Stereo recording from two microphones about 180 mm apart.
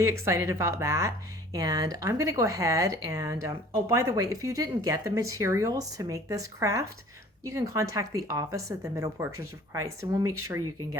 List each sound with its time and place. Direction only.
0.0 s speech: 15° right (ahead or behind)